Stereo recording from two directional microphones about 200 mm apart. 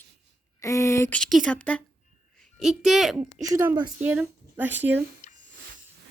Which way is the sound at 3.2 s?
20° right (ahead or behind).